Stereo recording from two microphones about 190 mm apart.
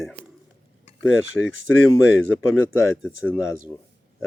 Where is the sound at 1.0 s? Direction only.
90° right.